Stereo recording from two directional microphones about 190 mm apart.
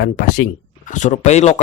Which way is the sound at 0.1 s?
40° left (ahead or behind).